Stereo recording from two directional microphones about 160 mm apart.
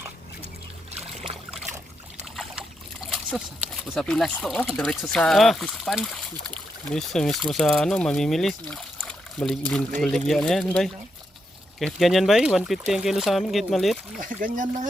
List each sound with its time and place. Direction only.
2.3 s trickle: centre (ahead or behind)
3.1 s slosh: 5° right (ahead or behind)
3.9 s speech: centre (ahead or behind)
14.2 s speech: 55° right (ahead or behind)